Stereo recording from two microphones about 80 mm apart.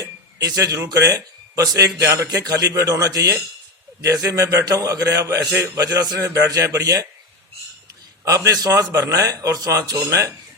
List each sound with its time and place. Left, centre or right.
0.3 s a man's voice: right
2.0 s speech: right
2.4 s a man's voice: right
8.2 s a man's voice: right